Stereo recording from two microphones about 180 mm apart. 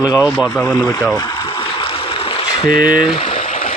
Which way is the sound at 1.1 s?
20° left (ahead or behind).